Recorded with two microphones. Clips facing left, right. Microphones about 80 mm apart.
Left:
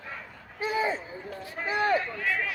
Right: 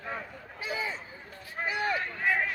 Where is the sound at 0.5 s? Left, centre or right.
Left.